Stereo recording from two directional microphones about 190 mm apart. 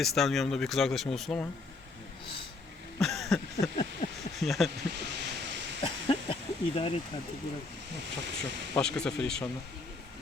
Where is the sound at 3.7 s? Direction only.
45° left (ahead or behind).